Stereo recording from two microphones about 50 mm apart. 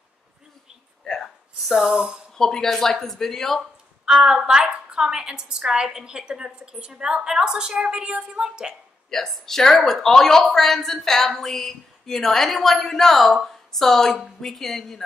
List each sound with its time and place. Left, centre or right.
1.2 s a sound: centre
2.3 s speech: centre
4.0 s a woman's voice: centre
9.1 s speech: centre